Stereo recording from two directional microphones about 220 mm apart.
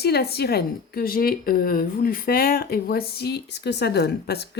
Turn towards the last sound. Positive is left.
turn(degrees=45)  # may be behind; listen again after turning